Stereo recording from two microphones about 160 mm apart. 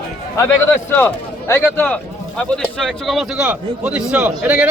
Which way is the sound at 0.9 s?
15° left (ahead or behind).